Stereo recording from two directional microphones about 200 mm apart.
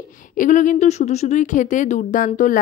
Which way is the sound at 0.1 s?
40° left (ahead or behind).